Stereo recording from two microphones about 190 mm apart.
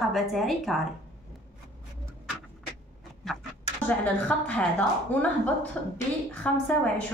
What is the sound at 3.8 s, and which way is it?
A woman's voice, 5° left (ahead or behind).